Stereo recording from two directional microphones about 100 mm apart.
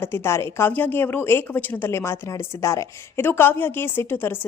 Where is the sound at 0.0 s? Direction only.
25° left (ahead or behind).